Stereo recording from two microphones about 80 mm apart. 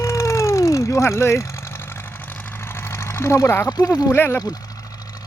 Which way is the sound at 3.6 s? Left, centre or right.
Left.